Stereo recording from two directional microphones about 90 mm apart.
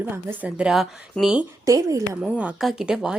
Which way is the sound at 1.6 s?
40° right (ahead or behind).